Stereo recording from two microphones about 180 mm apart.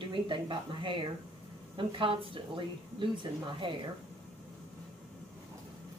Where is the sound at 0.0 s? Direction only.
25° right (ahead or behind).